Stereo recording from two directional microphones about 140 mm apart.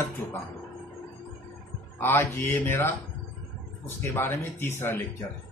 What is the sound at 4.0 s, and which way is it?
A man's voice, 20° left (ahead or behind).